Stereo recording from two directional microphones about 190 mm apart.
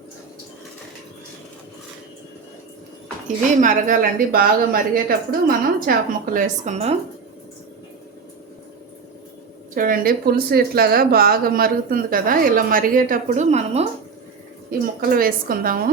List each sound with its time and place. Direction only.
3.2 s a woman's voice: 40° right (ahead or behind)
6.3 s a woman's voice: 35° right (ahead or behind)
9.7 s a woman's voice: 50° right (ahead or behind)
14.7 s a woman's voice: 50° right (ahead or behind)